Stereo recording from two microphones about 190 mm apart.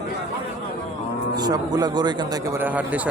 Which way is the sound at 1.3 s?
20° right (ahead or behind).